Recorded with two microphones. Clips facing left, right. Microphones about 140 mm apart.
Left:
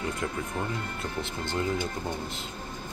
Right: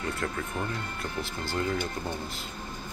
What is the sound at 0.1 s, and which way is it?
Speech, 15° left (ahead or behind).